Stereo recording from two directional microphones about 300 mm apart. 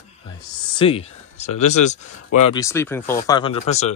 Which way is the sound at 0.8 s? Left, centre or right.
Centre.